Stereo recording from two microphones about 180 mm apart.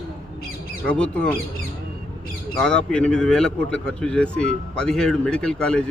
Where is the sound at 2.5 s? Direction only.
5° left (ahead or behind).